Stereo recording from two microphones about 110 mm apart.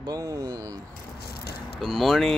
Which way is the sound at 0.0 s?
35° right (ahead or behind).